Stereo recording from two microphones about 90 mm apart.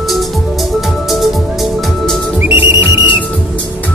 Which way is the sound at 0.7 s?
Centre (ahead or behind).